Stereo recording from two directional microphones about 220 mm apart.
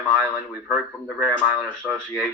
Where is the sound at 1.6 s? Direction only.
5° left (ahead or behind).